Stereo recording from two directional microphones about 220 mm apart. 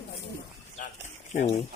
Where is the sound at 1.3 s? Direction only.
35° left (ahead or behind).